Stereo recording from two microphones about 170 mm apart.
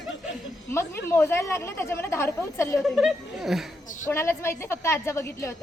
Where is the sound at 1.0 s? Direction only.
15° left (ahead or behind).